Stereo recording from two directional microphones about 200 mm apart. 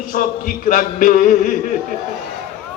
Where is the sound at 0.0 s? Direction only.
40° left (ahead or behind).